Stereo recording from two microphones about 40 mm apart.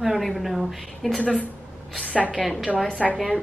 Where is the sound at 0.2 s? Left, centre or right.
Centre.